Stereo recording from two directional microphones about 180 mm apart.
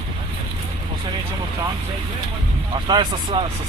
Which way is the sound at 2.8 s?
25° right (ahead or behind).